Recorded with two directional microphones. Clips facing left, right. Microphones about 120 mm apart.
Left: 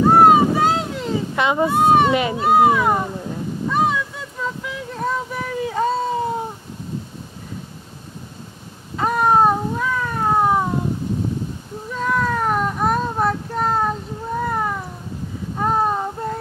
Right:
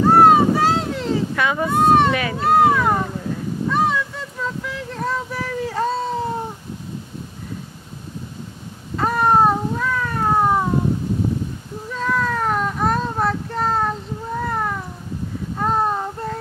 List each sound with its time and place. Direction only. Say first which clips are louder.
0.1 s vehicle: right 1 dB; centre (ahead or behind)
1.3 s a child's voice: left 2 dB; 20° left (ahead or behind)
1.7 s a child's voice: right 1 dB; 5° left (ahead or behind)
3.6 s a sound: even; 5° left (ahead or behind)
8.9 s cat: even; 5° left (ahead or behind)
11.9 s a sound: left 1 dB; 5° left (ahead or behind)